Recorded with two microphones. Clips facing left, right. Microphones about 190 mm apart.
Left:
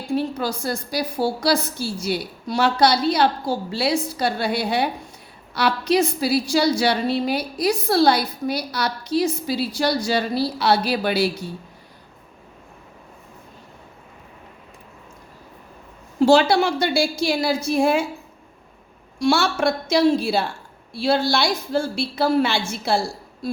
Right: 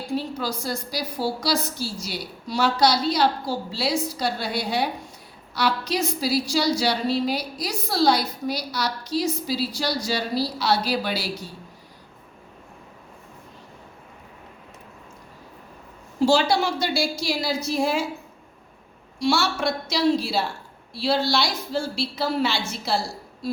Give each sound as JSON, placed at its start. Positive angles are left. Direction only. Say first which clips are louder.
{"t": 0.1, "sound": "a woman's voice", "louder": "left 5 dB", "side_deg": 55}
{"t": 16.2, "sound": "a woman's voice", "louder": "left 4 dB", "side_deg": 55}
{"t": 19.2, "sound": "a woman's voice", "louder": "left 4 dB", "side_deg": 55}